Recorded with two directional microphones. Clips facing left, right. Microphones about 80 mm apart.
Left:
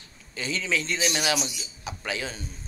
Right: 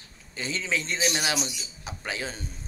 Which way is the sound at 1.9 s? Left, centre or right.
Right.